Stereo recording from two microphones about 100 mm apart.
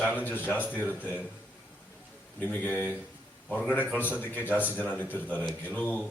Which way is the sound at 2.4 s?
20° left (ahead or behind).